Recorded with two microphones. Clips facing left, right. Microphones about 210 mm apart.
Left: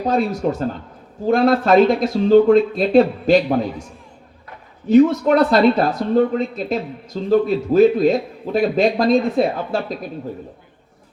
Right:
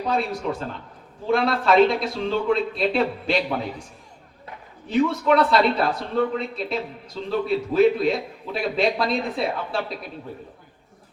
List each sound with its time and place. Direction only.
0.0 s speech: 45° left (ahead or behind)
4.9 s speech: 45° left (ahead or behind)